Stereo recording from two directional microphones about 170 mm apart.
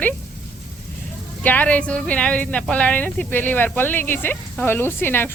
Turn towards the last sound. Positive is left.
turn(degrees=10)  # may be behind; listen again after turning